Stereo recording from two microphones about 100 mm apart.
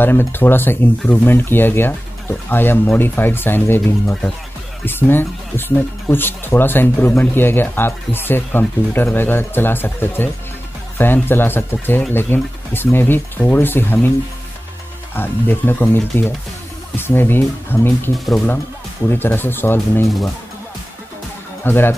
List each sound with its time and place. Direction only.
0.0 s speech: 20° left (ahead or behind)
15.1 s speech: 20° left (ahead or behind)
18.1 s speech: centre (ahead or behind)
19.0 s speech: 20° left (ahead or behind)
21.6 s speech: 20° left (ahead or behind)